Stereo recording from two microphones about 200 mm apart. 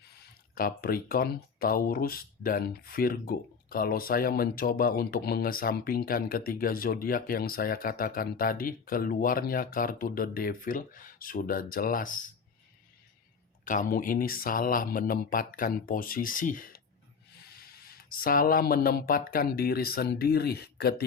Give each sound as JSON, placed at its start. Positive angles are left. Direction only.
{"t": 0.2, "sound": "speech", "side_deg": 50}
{"t": 13.7, "sound": "speech", "side_deg": 45}